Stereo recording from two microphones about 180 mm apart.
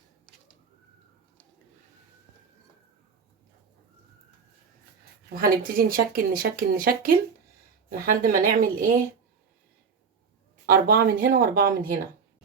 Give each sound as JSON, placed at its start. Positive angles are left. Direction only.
{"t": 5.3, "sound": "speech", "side_deg": -55}
{"t": 10.7, "sound": "speech", "side_deg": -50}